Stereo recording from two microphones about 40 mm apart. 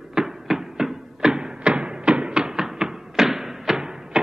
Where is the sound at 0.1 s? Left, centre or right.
Centre.